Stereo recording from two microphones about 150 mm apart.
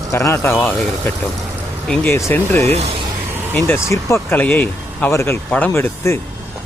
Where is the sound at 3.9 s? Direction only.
20° left (ahead or behind).